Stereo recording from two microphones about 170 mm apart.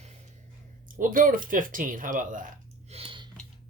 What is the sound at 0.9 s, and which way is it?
Speech, 55° right (ahead or behind).